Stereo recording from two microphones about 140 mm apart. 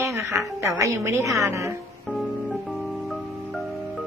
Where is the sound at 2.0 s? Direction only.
Centre (ahead or behind).